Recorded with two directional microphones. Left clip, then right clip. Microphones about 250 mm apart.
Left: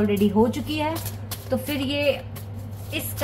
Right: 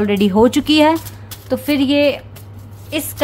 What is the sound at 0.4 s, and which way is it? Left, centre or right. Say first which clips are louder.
A woman's voice: right 11 dB; right.